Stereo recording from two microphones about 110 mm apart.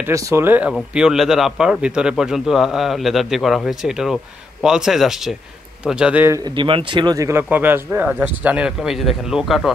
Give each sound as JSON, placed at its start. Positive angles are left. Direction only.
{"t": 0.0, "sound": "speech", "side_deg": -30}
{"t": 0.9, "sound": "a man's voice", "side_deg": -5}
{"t": 6.4, "sound": "speech", "side_deg": -50}
{"t": 7.2, "sound": "speech", "side_deg": -25}